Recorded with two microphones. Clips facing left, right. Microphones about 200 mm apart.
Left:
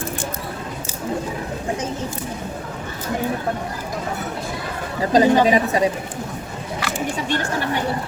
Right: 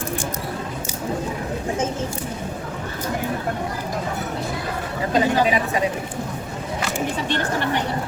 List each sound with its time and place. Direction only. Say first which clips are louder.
5.1 s a woman's voice: left 5 dB; 35° left (ahead or behind)